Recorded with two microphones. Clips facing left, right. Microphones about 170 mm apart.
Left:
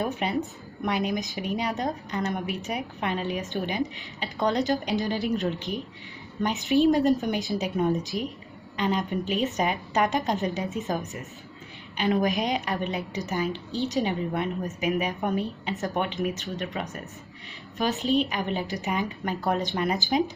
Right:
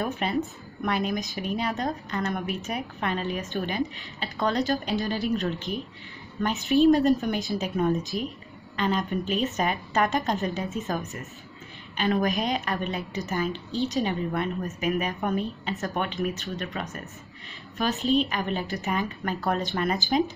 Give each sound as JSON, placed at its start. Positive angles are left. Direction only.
{"t": 0.0, "sound": "a woman's voice", "side_deg": 15}
{"t": 12.0, "sound": "a woman's voice", "side_deg": 15}